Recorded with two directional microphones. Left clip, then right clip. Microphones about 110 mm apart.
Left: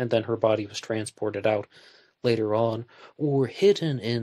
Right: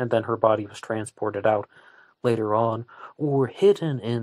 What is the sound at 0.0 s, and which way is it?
Speech, 20° left (ahead or behind).